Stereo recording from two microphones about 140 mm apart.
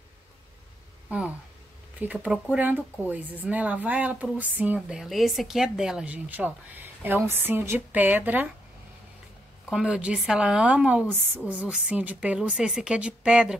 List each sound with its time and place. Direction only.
1.0 s a sound: 10° right (ahead or behind)
2.0 s speech: 10° right (ahead or behind)
9.7 s speech: 5° right (ahead or behind)